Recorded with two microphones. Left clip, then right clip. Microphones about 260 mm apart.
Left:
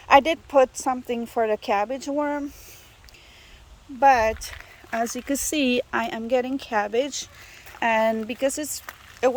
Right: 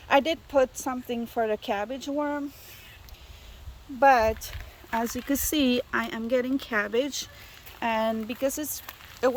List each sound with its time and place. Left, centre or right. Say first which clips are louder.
0.1 s speech: left 6 dB; centre
4.0 s speech: left 2 dB; centre